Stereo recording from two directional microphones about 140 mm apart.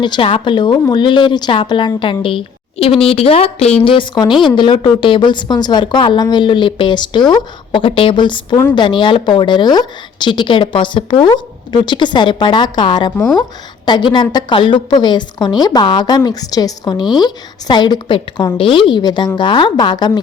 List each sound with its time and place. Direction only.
0.0 s a woman's voice: 35° left (ahead or behind)